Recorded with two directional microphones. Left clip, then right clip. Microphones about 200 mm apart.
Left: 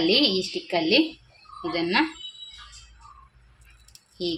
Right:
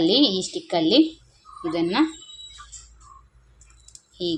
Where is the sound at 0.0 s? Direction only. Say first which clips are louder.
Right 2 dB; 25° right (ahead or behind).